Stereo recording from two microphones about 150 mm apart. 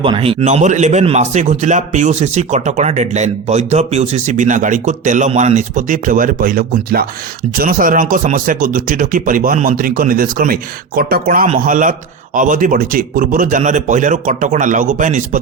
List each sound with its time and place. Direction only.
0.0 s a man's voice: 35° right (ahead or behind); by 7.1 s 85° right
7.6 s a man's voice: 70° right (ahead or behind)